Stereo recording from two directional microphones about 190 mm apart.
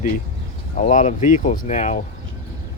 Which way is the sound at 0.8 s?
45° left (ahead or behind).